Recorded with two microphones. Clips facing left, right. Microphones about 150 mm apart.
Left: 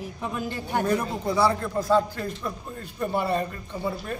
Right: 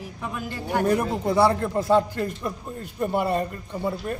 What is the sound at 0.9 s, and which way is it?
A man's voice, 25° right (ahead or behind).